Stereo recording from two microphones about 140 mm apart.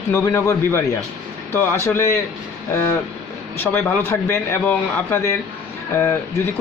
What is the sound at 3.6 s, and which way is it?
A man's voice, 15° left (ahead or behind).